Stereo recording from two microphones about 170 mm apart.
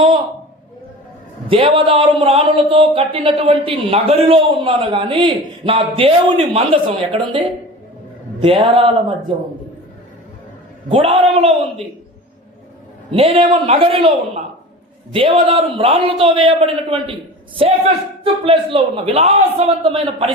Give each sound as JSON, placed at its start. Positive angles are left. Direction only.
{"t": 1.5, "sound": "speech", "side_deg": -30}
{"t": 10.8, "sound": "speech", "side_deg": -35}
{"t": 13.1, "sound": "speech", "side_deg": -35}
{"t": 18.2, "sound": "speech", "side_deg": -35}